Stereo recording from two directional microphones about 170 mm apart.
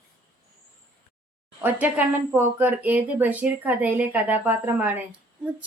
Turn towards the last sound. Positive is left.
turn(degrees=-10)  # may be behind; listen again after turning